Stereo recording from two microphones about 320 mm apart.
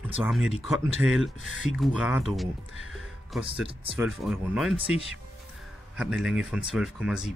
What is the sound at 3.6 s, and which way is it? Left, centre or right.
Speech, centre.